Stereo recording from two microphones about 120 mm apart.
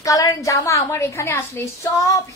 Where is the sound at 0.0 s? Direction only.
30° left (ahead or behind).